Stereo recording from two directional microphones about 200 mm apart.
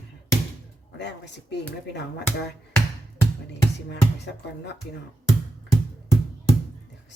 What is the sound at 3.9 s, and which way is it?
Speech, 60° left (ahead or behind).